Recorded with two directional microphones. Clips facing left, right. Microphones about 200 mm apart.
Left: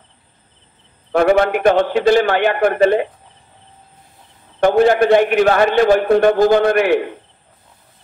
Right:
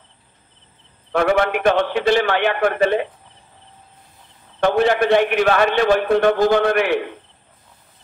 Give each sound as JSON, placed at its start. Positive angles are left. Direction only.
{"t": 1.1, "sound": "a man's voice", "side_deg": 40}
{"t": 4.6, "sound": "a man's voice", "side_deg": 45}